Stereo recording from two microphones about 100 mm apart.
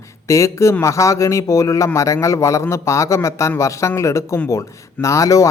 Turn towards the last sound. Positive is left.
turn(degrees=35)  # may be behind; listen again after turning